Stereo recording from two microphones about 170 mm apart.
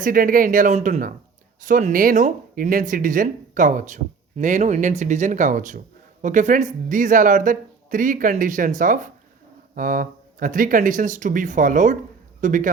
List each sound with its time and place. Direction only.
0.0 s speech: 55° right (ahead or behind)